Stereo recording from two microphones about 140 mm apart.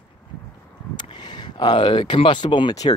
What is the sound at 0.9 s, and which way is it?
Speech, 30° left (ahead or behind).